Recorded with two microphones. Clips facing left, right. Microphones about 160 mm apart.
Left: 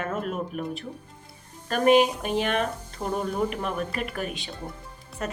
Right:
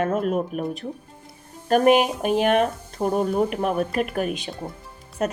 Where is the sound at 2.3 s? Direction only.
50° right (ahead or behind).